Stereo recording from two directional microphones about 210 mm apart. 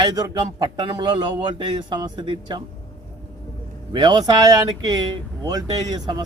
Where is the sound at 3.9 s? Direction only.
20° right (ahead or behind).